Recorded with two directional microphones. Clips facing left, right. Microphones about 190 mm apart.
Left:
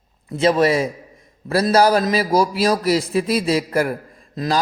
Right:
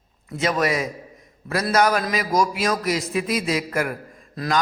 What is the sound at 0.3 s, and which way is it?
A man's voice, 30° left (ahead or behind).